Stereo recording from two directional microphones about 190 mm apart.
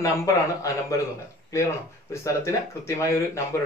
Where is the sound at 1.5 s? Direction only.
15° left (ahead or behind).